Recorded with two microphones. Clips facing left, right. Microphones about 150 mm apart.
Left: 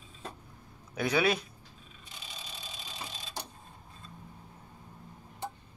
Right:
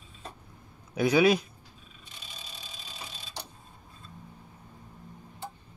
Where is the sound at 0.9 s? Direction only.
10° right (ahead or behind).